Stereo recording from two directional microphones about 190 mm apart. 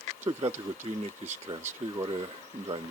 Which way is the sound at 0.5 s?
10° right (ahead or behind).